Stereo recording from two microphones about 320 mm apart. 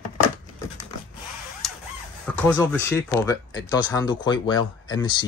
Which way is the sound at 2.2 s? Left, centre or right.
Centre.